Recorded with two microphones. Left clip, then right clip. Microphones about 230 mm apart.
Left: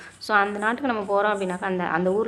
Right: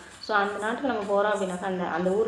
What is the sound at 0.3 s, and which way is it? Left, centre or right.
A woman's voice, left.